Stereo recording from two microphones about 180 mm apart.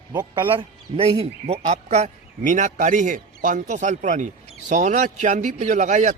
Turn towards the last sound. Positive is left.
turn(degrees=-40)  # may be behind; listen again after turning